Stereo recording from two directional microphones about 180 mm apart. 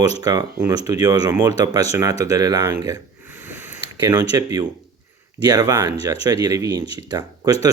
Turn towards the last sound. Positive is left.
turn(degrees=-20)  # may be behind; listen again after turning